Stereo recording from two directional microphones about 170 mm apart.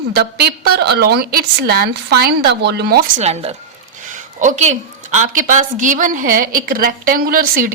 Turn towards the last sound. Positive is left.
turn(degrees=-55)  # may be behind; listen again after turning